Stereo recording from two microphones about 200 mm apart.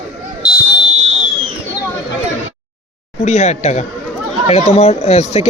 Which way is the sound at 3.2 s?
35° left (ahead or behind).